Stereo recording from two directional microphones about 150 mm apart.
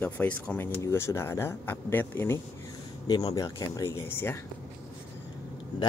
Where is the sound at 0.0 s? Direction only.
10° left (ahead or behind).